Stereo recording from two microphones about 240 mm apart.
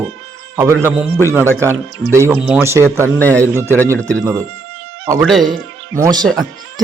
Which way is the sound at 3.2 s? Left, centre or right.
Centre.